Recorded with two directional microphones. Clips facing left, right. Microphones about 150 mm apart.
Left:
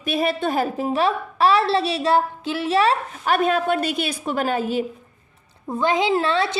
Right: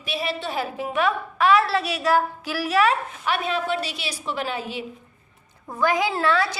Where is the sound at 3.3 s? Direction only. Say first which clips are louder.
Left 6 dB; 50° left (ahead or behind).